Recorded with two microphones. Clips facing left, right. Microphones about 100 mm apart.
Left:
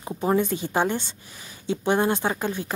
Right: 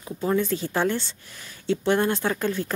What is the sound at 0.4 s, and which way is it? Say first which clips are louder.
Speech: left 1 dB; 15° left (ahead or behind).